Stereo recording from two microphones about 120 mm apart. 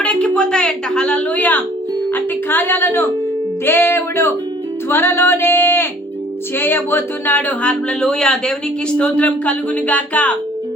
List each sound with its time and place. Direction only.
0.0 s a woman's voice: 10° left (ahead or behind)
3.7 s music: 20° left (ahead or behind)
6.6 s speech: 20° left (ahead or behind)